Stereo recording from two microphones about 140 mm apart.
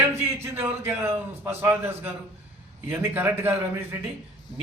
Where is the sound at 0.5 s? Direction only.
15° right (ahead or behind).